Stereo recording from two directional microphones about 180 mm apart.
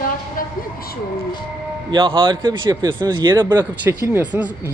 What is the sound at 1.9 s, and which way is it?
Speech, 30° right (ahead or behind).